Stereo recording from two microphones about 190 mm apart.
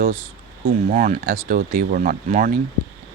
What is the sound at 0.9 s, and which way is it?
Speech, 40° right (ahead or behind).